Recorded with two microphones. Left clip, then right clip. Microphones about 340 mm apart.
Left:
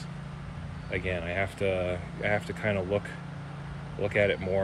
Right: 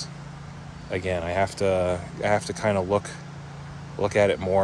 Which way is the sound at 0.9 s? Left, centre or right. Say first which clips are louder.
Right 5 dB; centre.